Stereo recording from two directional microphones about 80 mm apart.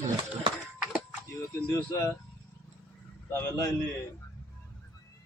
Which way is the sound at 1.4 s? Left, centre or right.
Left.